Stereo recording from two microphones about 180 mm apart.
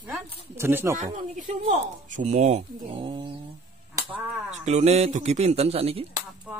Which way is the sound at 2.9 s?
30° right (ahead or behind).